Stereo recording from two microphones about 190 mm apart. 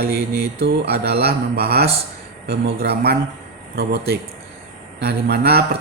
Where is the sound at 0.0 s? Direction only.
55° right (ahead or behind).